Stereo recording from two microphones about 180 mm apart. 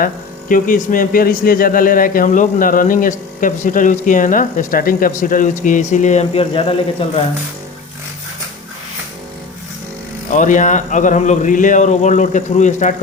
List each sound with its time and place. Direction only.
0.0 s speech: 50° left (ahead or behind); by 7.1 s 30° left (ahead or behind)
10.3 s speech: 45° left (ahead or behind)